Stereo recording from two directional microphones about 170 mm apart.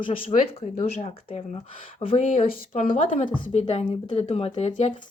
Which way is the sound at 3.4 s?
40° left (ahead or behind).